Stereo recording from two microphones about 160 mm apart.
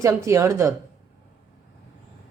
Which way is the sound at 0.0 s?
20° right (ahead or behind).